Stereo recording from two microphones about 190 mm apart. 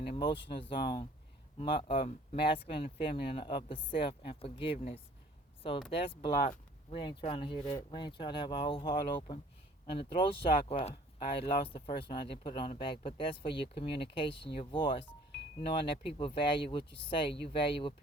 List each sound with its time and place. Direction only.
0.0 s speech: 30° left (ahead or behind)